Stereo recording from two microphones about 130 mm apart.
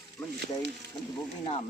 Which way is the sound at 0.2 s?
15° left (ahead or behind).